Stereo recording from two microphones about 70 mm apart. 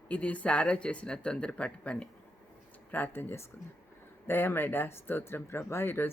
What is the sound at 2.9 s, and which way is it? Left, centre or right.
Speech, left.